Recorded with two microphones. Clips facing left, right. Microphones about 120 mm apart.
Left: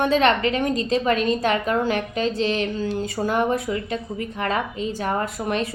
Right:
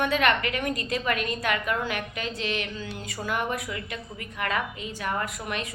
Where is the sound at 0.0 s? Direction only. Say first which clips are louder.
Left 6 dB; 30° left (ahead or behind).